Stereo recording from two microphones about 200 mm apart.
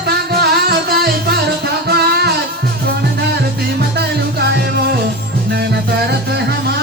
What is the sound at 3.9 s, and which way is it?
Music, 55° right (ahead or behind).